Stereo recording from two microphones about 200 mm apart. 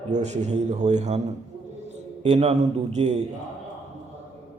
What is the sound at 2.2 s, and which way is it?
Speech, 30° right (ahead or behind).